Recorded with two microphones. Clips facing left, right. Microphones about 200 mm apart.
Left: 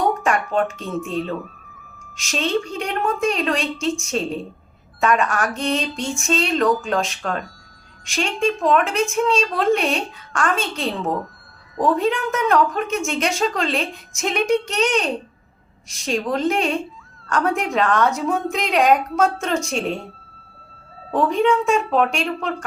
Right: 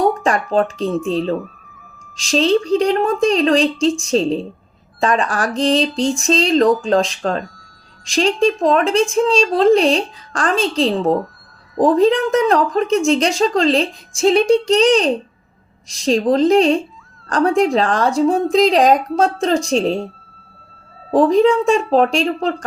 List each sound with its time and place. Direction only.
0.2 s speech: 35° right (ahead or behind)
21.1 s speech: 35° right (ahead or behind)